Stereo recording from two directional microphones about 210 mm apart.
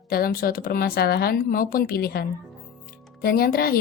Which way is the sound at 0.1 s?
45° left (ahead or behind).